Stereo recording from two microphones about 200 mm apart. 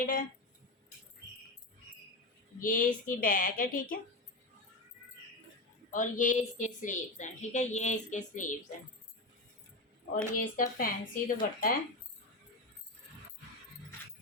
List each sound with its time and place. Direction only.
0.0 s a woman's voice: 45° left (ahead or behind)
2.6 s a woman's voice: 45° left (ahead or behind)
5.9 s a woman's voice: 40° left (ahead or behind)
10.2 s a woman's voice: 45° left (ahead or behind)